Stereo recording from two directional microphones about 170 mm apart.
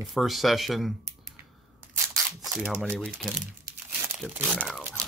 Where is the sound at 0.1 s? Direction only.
Centre (ahead or behind).